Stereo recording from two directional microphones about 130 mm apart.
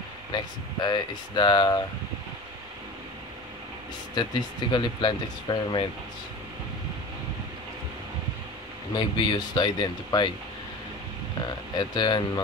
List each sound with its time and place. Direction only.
0.3 s speech: 35° left (ahead or behind)
4.1 s speech: 35° left (ahead or behind)
8.9 s speech: 35° left (ahead or behind)
11.8 s speech: 35° left (ahead or behind)